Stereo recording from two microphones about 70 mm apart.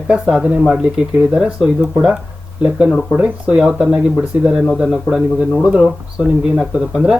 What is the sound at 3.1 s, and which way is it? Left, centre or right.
Speech, right.